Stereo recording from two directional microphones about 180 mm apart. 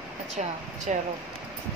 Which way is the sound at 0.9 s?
40° right (ahead or behind).